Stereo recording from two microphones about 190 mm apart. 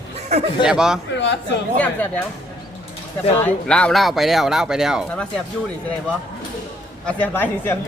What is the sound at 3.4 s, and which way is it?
Speech, 5° left (ahead or behind).